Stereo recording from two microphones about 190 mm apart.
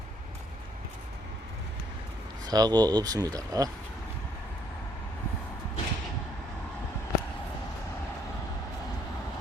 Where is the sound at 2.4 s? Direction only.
20° right (ahead or behind).